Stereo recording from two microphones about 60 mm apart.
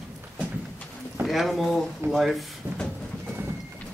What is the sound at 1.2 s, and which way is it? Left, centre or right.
Speech, centre.